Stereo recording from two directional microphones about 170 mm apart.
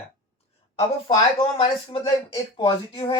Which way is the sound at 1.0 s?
30° left (ahead or behind).